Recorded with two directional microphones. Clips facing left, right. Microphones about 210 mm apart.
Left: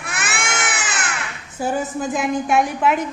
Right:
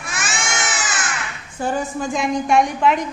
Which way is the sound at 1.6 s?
5° left (ahead or behind).